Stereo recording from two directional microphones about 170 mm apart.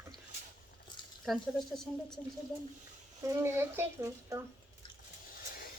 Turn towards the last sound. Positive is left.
turn(degrees=-15)  # may be behind; listen again after turning